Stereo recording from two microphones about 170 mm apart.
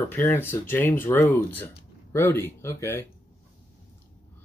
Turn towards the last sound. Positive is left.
turn(degrees=15)  # may be behind; listen again after turning